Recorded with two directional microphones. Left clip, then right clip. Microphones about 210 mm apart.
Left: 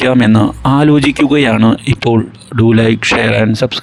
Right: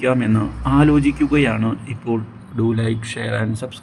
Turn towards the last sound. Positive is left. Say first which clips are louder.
# left 12 dB
turn(degrees=40)  # may be behind; listen again after turning